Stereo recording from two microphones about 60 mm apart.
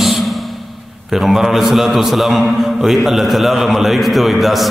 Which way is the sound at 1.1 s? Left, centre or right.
Centre.